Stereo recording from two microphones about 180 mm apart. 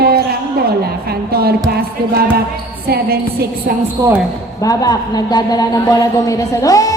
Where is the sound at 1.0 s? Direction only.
60° right (ahead or behind).